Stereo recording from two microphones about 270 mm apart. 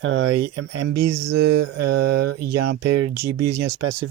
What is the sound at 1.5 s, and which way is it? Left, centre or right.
Mantra, right.